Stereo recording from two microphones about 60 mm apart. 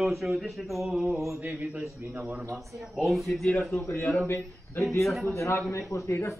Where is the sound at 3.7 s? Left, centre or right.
Left.